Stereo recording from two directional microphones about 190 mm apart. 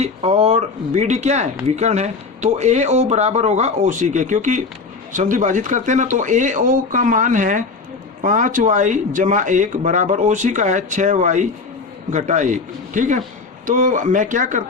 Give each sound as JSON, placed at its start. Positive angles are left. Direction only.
{"t": 0.0, "sound": "speech", "side_deg": -35}